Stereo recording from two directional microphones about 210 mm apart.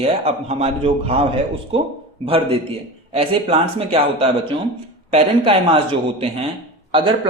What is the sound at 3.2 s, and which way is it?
A man's voice, 30° right (ahead or behind).